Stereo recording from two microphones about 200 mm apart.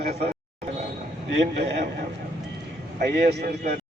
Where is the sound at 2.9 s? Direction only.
50° right (ahead or behind).